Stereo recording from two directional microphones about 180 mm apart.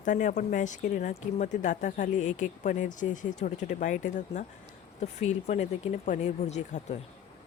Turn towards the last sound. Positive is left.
turn(degrees=40)  # may be behind; listen again after turning